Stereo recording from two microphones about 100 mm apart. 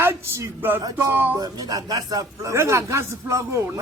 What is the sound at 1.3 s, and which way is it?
A man's voice, 40° right (ahead or behind).